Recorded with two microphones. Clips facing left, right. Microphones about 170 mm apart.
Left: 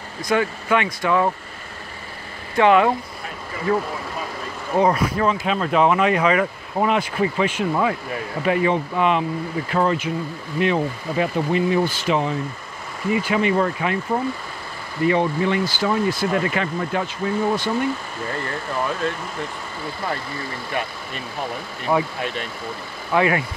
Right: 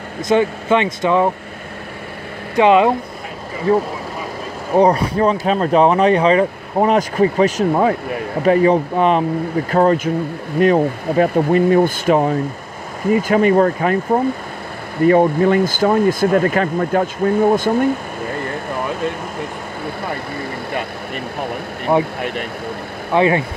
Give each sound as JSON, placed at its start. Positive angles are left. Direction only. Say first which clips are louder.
{"t": 0.2, "sound": "speech", "louder": "right 6 dB", "side_deg": -25}
{"t": 2.5, "sound": "speech", "louder": "right 4 dB", "side_deg": -20}
{"t": 20.7, "sound": "speech", "louder": "right 1 dB", "side_deg": -60}
{"t": 21.9, "sound": "speech", "louder": "right 5 dB", "side_deg": -25}
{"t": 22.2, "sound": "speech", "louder": "right 4 dB", "side_deg": -60}
{"t": 23.1, "sound": "speech", "louder": "right 4 dB", "side_deg": -25}